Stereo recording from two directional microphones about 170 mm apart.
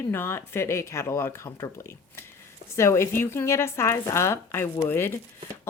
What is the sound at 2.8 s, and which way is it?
A woman's voice, 15° left (ahead or behind).